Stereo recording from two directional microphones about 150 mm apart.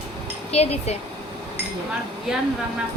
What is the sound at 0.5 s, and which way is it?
Speech, 45° left (ahead or behind).